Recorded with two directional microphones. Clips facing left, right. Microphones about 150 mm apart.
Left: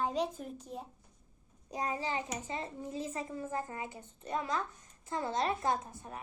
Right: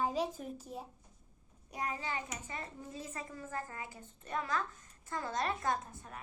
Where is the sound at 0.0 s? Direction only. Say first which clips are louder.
Left 1 dB; centre (ahead or behind).